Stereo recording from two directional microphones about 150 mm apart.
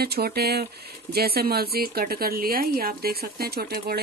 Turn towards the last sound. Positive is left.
turn(degrees=-90)